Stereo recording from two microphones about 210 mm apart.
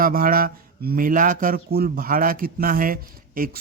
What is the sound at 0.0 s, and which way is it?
Speech, 40° right (ahead or behind).